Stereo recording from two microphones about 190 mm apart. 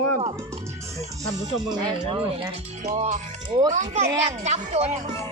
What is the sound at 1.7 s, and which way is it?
Speech, 20° right (ahead or behind).